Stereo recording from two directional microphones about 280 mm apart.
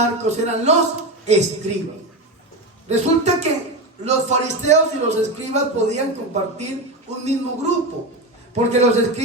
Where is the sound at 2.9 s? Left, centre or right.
Right.